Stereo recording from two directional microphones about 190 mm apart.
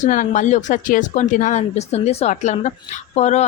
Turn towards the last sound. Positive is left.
turn(degrees=35)  # may be behind; listen again after turning